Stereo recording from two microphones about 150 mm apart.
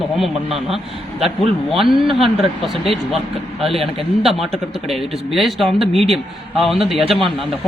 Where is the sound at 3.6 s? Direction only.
Centre (ahead or behind).